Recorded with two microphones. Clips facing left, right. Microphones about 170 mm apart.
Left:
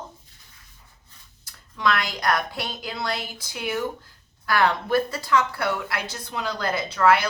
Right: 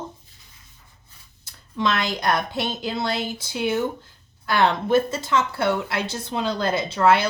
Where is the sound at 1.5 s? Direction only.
25° right (ahead or behind).